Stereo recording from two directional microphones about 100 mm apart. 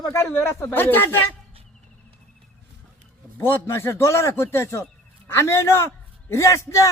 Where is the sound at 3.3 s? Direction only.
25° left (ahead or behind).